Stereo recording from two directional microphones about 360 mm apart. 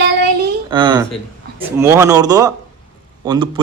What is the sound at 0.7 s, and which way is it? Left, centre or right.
A man's voice, centre.